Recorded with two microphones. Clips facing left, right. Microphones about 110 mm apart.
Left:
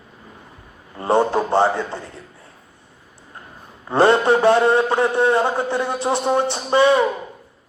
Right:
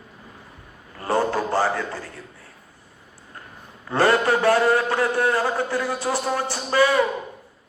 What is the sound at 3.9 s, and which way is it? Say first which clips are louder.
A man's voice: left 4 dB; 25° left (ahead or behind).